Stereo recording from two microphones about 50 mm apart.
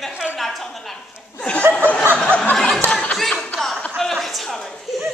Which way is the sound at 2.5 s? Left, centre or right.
Centre.